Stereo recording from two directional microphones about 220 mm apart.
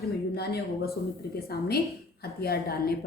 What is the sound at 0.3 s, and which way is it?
Speech, 45° left (ahead or behind).